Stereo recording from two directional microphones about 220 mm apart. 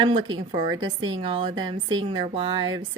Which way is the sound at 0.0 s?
20° right (ahead or behind).